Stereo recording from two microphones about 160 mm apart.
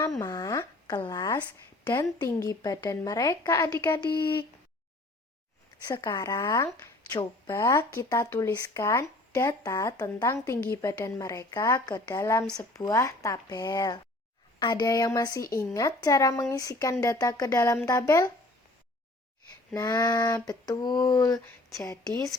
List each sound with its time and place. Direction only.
0.0 s speech: 20° left (ahead or behind)
5.9 s speech: 20° left (ahead or behind)
6.8 s a sound: 25° left (ahead or behind)
7.5 s speech: 20° left (ahead or behind)
19.7 s speech: 25° left (ahead or behind)